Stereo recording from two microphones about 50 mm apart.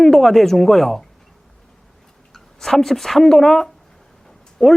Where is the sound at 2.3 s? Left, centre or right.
Centre.